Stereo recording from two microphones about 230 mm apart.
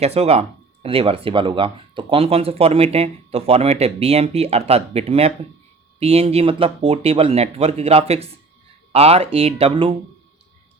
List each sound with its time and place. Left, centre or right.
0.0 s speech: right